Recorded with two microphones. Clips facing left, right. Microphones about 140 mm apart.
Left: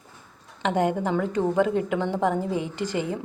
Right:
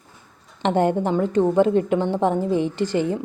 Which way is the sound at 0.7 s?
35° right (ahead or behind).